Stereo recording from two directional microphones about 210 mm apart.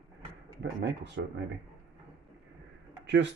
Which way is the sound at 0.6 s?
55° right (ahead or behind).